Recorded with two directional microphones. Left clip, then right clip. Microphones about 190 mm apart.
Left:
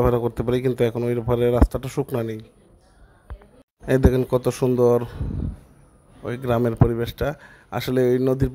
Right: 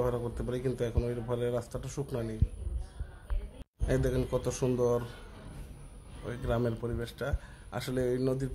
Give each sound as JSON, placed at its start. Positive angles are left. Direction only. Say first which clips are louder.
{"t": 0.0, "sound": "a man's voice", "louder": "left 12 dB", "side_deg": 45}
{"t": 3.8, "sound": "a man's voice", "louder": "left 11 dB", "side_deg": 45}
{"t": 6.2, "sound": "a man's voice", "louder": "left 10 dB", "side_deg": 45}